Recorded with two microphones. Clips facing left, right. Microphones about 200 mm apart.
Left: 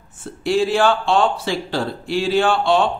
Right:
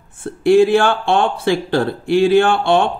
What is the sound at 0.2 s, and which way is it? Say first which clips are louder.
A man's voice: right 8 dB; 55° right (ahead or behind).